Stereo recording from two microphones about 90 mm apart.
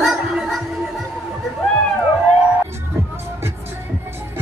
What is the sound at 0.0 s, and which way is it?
Music, 5° right (ahead or behind).